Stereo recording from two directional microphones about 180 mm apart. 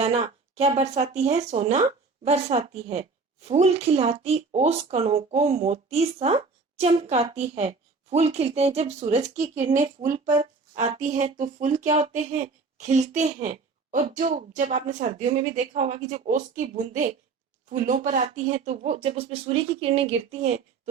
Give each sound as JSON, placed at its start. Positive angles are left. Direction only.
{"t": 0.0, "sound": "a woman's voice", "side_deg": -35}